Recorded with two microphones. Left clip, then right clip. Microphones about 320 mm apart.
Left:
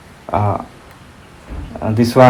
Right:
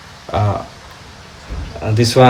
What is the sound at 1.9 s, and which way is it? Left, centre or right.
Speech, centre.